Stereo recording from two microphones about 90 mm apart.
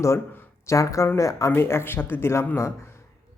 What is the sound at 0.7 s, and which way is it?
A man's voice, 35° left (ahead or behind).